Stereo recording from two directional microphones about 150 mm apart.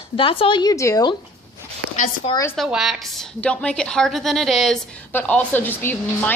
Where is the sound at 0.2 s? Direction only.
35° left (ahead or behind).